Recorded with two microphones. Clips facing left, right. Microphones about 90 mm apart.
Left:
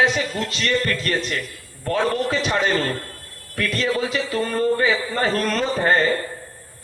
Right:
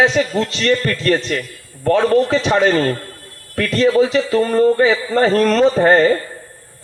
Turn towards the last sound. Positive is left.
turn(degrees=-35)  # may be behind; listen again after turning